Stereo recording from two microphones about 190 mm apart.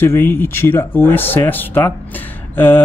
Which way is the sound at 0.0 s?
10° left (ahead or behind).